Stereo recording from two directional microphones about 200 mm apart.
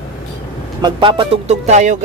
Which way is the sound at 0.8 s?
25° right (ahead or behind).